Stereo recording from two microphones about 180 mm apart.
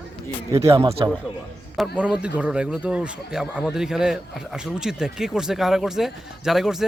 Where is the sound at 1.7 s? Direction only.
Centre (ahead or behind).